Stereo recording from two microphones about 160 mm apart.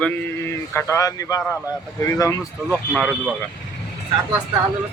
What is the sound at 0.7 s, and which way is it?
Speech, 20° left (ahead or behind).